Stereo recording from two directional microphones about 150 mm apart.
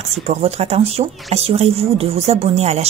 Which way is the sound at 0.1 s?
45° right (ahead or behind).